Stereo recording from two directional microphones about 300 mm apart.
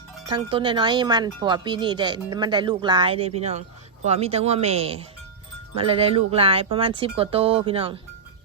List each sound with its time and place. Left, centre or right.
0.3 s speech: centre